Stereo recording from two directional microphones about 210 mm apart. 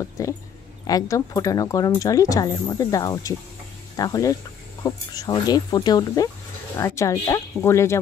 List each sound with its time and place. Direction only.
0.0 s speech: 15° left (ahead or behind)